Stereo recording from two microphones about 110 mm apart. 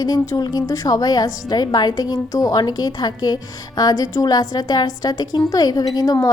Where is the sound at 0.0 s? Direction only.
35° left (ahead or behind).